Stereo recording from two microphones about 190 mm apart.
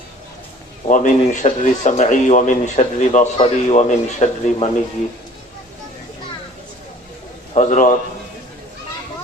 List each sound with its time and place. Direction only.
0.9 s speech: 40° left (ahead or behind)
7.5 s speech: 40° left (ahead or behind)